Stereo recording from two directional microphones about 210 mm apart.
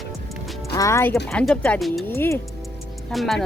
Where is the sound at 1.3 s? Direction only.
5° left (ahead or behind).